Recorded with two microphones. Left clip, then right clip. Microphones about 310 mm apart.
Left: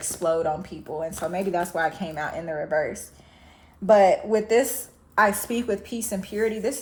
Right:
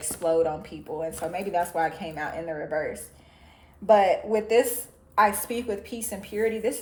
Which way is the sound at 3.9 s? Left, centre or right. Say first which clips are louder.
Left 2 dB; left.